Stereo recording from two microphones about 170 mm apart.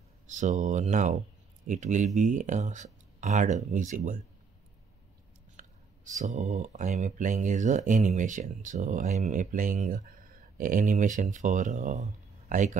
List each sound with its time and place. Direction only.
0.3 s speech: 45° right (ahead or behind)
5.6 s speech: 45° right (ahead or behind)